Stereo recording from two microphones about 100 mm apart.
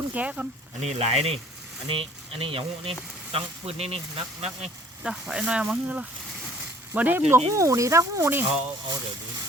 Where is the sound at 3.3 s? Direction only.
90° right.